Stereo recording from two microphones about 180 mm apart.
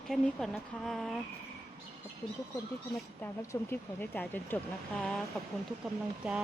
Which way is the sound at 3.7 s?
10° left (ahead or behind).